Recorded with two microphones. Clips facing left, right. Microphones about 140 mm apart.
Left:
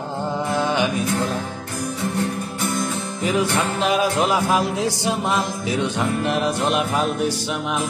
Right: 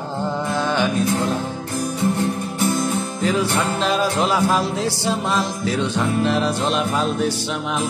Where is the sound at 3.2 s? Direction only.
10° left (ahead or behind).